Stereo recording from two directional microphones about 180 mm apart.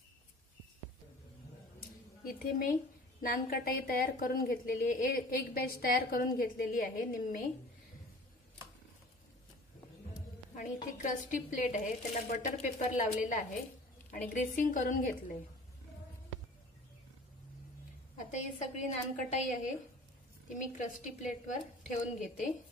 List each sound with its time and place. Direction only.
1.8 s a sound: 55° left (ahead or behind)
3.2 s a woman's voice: 55° left (ahead or behind)
10.5 s a woman's voice: 45° left (ahead or behind)
18.1 s a woman's voice: 40° left (ahead or behind)